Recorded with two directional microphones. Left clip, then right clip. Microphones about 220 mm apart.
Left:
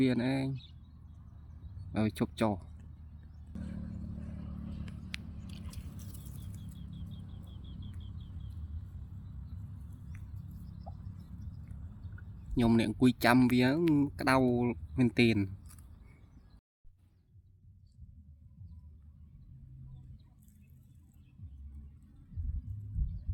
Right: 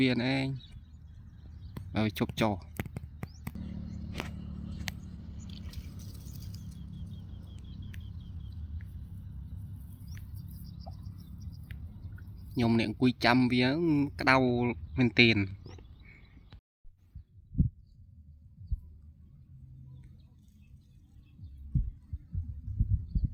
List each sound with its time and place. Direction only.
0.0 s speech: centre (ahead or behind)
1.9 s speech: centre (ahead or behind)
3.6 s vehicle: 10° right (ahead or behind)
5.5 s squish: 5° left (ahead or behind)
12.5 s speech: centre (ahead or behind)